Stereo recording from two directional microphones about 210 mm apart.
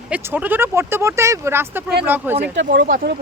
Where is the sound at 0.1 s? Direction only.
10° right (ahead or behind).